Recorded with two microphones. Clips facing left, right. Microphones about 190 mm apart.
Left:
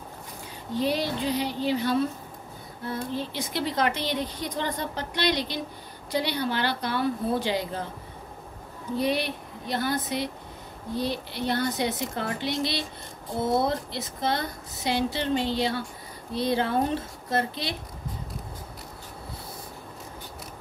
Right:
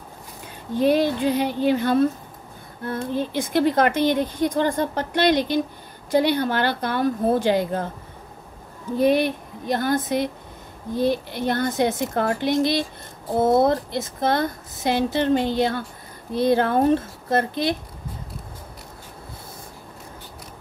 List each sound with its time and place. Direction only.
0.7 s speech: 50° right (ahead or behind)
8.9 s speech: 50° right (ahead or behind)